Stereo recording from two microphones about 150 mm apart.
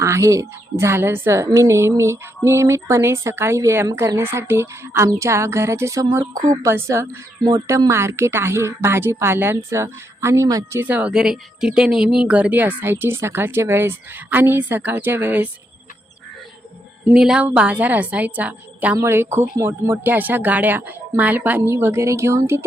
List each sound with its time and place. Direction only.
0.0 s a woman's voice: 20° right (ahead or behind)
17.1 s a woman's voice: 5° right (ahead or behind)